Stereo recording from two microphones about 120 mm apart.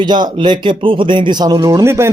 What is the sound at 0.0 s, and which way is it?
Speech, 40° right (ahead or behind).